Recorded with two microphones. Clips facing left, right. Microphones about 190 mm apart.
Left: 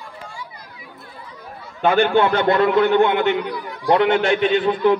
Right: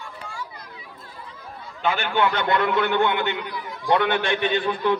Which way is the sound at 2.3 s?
45° left (ahead or behind).